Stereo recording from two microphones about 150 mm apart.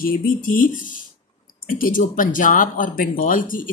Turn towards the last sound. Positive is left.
turn(degrees=65)  # may be behind; listen again after turning